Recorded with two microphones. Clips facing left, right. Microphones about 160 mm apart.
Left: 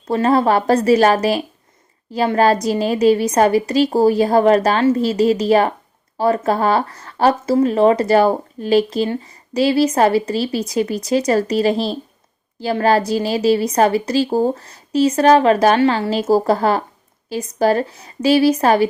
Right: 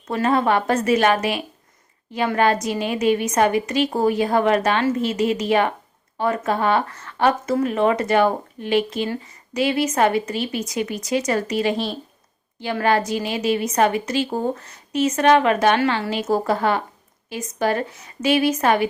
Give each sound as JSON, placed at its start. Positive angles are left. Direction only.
{"t": 0.1, "sound": "a woman's voice", "side_deg": 35}